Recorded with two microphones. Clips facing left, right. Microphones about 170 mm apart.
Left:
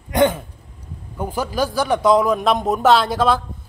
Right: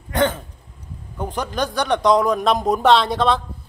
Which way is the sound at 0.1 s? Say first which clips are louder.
Left 3 dB; 15° left (ahead or behind).